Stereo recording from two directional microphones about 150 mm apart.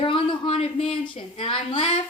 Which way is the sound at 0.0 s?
35° left (ahead or behind).